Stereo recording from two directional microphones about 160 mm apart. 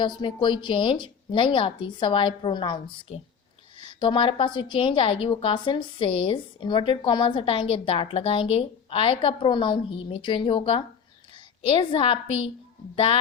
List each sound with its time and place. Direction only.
0.0 s a woman's voice: 30° left (ahead or behind)